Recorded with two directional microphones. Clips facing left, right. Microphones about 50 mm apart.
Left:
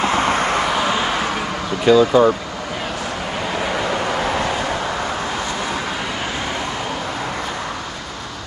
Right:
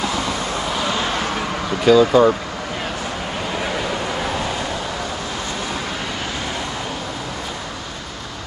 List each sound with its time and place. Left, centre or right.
0.0 s vehicle: left
0.8 s a sound: left
1.9 s speech: centre